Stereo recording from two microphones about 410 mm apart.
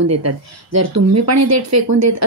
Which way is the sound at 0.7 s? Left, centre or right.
Right.